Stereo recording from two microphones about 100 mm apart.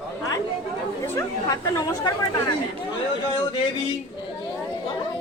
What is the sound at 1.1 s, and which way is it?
Speech, 35° left (ahead or behind).